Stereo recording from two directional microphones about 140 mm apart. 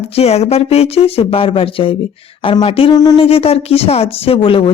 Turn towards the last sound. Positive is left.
turn(degrees=40)  # may be behind; listen again after turning